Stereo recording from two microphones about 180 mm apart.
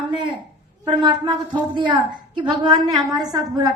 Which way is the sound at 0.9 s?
25° right (ahead or behind).